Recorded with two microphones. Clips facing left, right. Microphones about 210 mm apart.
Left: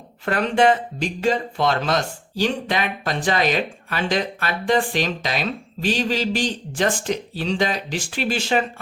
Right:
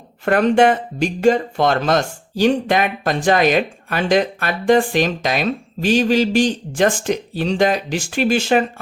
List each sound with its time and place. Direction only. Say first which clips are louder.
0.3 s speech: right 4 dB; 50° right (ahead or behind)